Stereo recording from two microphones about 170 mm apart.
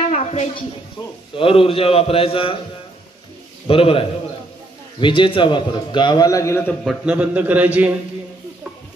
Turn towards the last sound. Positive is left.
turn(degrees=-10)  # may be behind; listen again after turning